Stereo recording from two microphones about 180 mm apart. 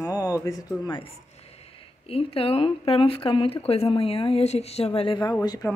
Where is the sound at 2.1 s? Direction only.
30° left (ahead or behind).